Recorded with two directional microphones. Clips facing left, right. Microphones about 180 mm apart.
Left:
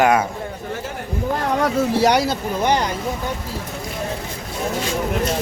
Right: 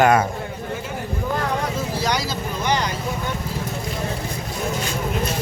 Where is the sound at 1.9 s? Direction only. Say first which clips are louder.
Left 7 dB; 65° left (ahead or behind).